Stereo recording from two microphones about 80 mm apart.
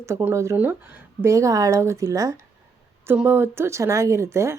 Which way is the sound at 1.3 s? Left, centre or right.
Right.